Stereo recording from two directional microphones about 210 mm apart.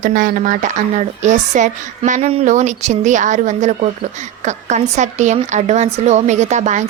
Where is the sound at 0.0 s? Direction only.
40° right (ahead or behind).